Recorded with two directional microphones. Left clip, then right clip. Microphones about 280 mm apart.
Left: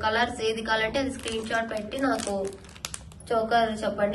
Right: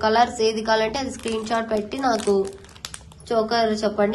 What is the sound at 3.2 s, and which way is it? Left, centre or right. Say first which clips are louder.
Speech: right 3 dB; right.